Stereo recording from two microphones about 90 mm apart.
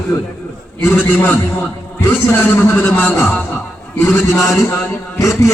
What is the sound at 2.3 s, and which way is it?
Speech, 25° left (ahead or behind).